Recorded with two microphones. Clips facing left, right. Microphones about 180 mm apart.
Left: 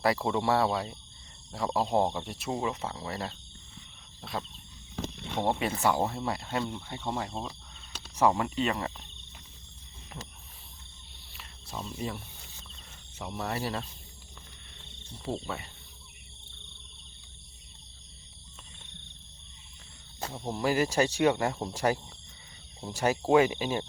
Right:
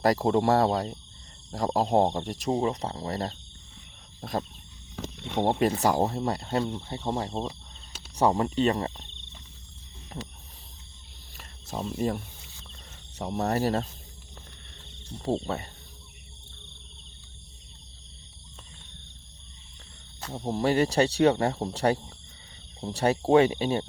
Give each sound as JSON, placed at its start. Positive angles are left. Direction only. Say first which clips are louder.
{"t": 0.0, "sound": "speech", "louder": "right 5 dB", "side_deg": -40}
{"t": 4.2, "sound": "wild animals", "louder": "right 6 dB", "side_deg": -40}
{"t": 5.5, "sound": "speech", "louder": "right 4 dB", "side_deg": -40}
{"t": 11.3, "sound": "cricket", "louder": "right 6 dB", "side_deg": -45}
{"t": 13.1, "sound": "speech", "louder": "right 7 dB", "side_deg": -40}
{"t": 15.2, "sound": "speech", "louder": "right 6 dB", "side_deg": -40}
{"t": 20.5, "sound": "speech", "louder": "right 4 dB", "side_deg": -30}